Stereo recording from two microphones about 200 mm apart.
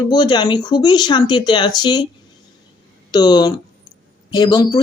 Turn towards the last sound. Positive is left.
turn(degrees=20)  # may be behind; listen again after turning